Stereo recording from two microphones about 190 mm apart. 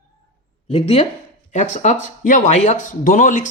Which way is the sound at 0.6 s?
30° left (ahead or behind).